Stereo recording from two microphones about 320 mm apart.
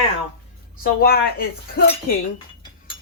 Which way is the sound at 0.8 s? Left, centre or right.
Left.